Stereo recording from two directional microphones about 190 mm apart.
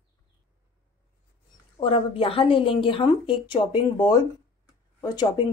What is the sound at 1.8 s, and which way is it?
Speech, 30° left (ahead or behind).